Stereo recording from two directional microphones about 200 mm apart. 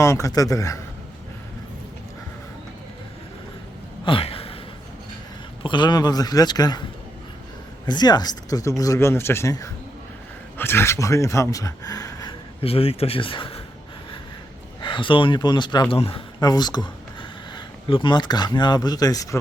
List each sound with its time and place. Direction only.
0.0 s speech: 15° left (ahead or behind)
4.0 s a sound: 25° left (ahead or behind)
5.6 s speech: 20° left (ahead or behind)
7.9 s speech: 20° left (ahead or behind)
12.6 s speech: 30° left (ahead or behind)
14.8 s speech: 25° left (ahead or behind)